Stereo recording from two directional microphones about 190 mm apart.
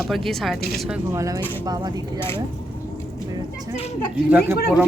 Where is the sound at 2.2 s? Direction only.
10° left (ahead or behind).